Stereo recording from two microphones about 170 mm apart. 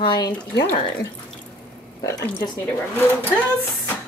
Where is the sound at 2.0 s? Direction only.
20° left (ahead or behind).